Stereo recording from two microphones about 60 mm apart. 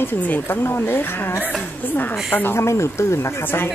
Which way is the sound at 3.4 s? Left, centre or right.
Left.